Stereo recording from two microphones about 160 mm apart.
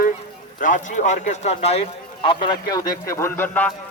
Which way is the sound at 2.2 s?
30° left (ahead or behind).